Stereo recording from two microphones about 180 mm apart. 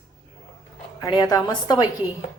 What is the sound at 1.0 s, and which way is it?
Speech, 25° left (ahead or behind).